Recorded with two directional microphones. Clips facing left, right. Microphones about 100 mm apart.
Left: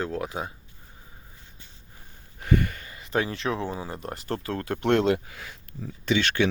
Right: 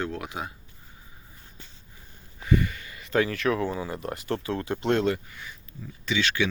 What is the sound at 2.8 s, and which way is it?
Speech, 30° left (ahead or behind).